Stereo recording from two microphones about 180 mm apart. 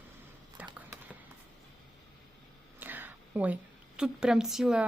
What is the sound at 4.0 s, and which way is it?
Speech, 5° right (ahead or behind).